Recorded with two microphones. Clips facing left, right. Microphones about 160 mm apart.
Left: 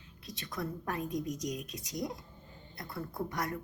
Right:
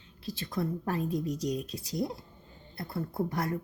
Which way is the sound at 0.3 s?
30° right (ahead or behind).